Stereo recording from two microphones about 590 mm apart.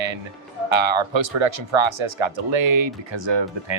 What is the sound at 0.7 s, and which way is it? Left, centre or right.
Speech, right.